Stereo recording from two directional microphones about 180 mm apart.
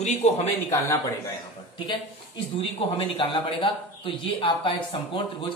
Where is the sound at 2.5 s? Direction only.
35° left (ahead or behind).